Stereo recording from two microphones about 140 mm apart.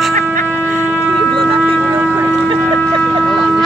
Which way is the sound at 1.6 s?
15° right (ahead or behind).